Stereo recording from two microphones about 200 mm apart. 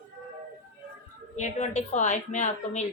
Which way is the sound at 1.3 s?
35° left (ahead or behind).